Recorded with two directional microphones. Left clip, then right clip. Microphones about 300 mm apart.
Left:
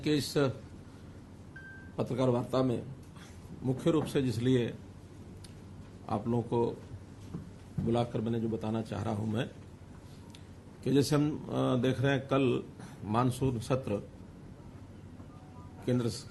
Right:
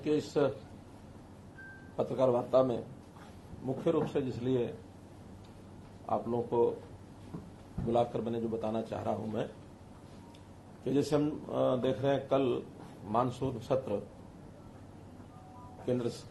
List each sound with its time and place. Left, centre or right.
0.1 s a man's voice: left
2.0 s a man's voice: left
3.8 s a man's voice: left
6.1 s a man's voice: left
7.9 s a man's voice: left
10.8 s a man's voice: left
15.9 s a man's voice: left